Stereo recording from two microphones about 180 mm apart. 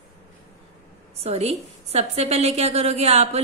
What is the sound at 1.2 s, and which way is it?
A woman's voice, 35° right (ahead or behind).